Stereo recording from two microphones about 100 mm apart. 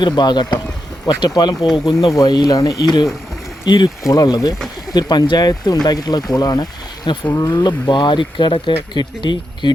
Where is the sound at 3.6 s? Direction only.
45° left (ahead or behind).